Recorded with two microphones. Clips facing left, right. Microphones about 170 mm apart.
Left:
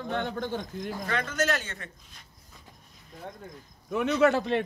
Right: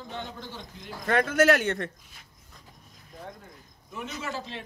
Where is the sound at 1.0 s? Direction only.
55° right (ahead or behind).